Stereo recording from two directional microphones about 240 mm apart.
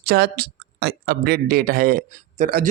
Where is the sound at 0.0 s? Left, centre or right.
Right.